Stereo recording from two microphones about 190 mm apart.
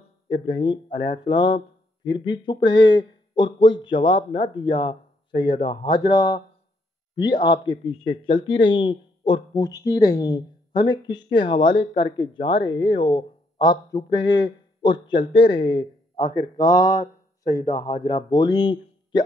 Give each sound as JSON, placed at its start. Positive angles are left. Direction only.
{"t": 0.3, "sound": "speech", "side_deg": 25}